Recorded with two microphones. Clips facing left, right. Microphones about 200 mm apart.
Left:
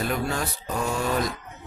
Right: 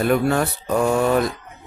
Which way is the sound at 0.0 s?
60° right (ahead or behind).